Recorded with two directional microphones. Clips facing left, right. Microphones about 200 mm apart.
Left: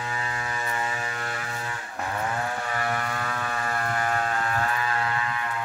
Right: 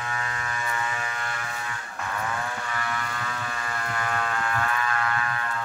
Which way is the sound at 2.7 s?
45° left (ahead or behind).